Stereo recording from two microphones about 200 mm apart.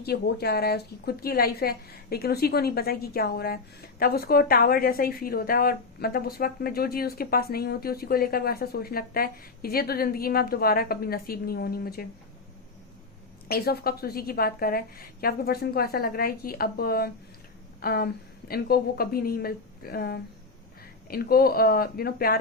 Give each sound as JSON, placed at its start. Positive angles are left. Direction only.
{"t": 0.0, "sound": "a woman's voice", "side_deg": 50}
{"t": 13.5, "sound": "a woman's voice", "side_deg": 50}